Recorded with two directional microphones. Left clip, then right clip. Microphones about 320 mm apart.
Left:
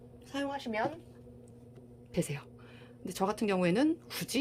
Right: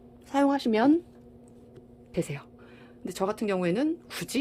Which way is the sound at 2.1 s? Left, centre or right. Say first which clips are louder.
Right 4 dB; centre.